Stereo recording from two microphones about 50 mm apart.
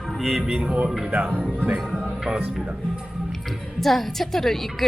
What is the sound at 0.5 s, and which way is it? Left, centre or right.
Speech, centre.